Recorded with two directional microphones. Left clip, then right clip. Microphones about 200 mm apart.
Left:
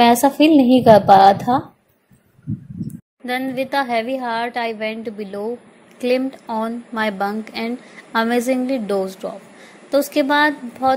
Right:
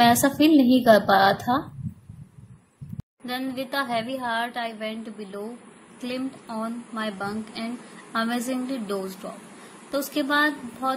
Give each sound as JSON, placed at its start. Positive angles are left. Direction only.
{"t": 0.0, "sound": "a woman's voice", "side_deg": 15}
{"t": 3.3, "sound": "a woman's voice", "side_deg": 25}